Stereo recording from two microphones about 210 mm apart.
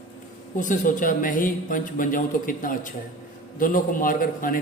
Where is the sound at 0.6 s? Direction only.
40° left (ahead or behind).